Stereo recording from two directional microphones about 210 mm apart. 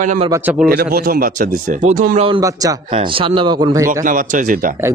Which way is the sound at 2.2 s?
20° right (ahead or behind).